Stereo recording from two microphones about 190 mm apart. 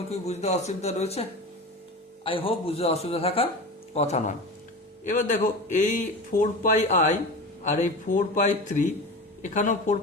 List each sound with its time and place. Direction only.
0.1 s a man's voice: 35° left (ahead or behind)